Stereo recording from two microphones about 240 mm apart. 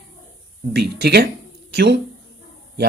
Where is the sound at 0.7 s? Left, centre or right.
Right.